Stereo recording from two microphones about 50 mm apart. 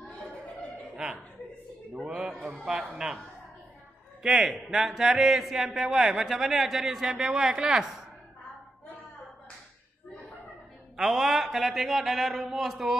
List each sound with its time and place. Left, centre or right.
0.1 s chuckle: left
0.9 s chuckle: centre
2.4 s speech: centre
4.2 s a man's voice: centre
11.0 s a man's voice: centre